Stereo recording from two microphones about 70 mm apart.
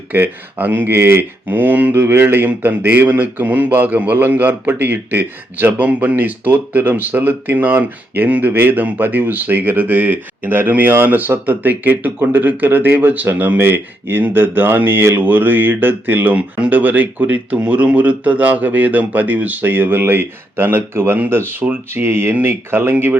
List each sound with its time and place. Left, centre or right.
0.1 s speech: right